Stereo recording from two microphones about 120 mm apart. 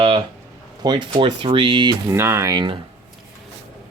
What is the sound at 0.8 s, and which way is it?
Speech, 40° right (ahead or behind).